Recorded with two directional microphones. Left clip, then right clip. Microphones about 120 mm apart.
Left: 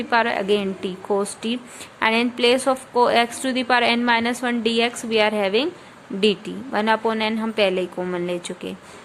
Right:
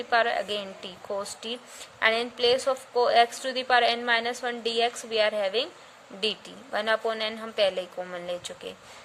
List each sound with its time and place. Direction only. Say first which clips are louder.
0.1 s a woman's voice: left 5 dB; 25° right (ahead or behind)